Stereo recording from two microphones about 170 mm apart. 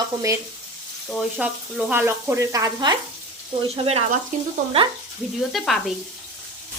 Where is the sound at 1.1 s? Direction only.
5° right (ahead or behind).